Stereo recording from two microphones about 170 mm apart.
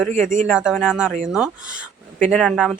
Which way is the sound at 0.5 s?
5° right (ahead or behind).